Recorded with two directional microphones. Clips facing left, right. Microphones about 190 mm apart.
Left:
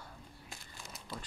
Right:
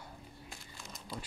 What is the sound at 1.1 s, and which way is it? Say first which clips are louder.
Speech: right 1 dB; 5° left (ahead or behind).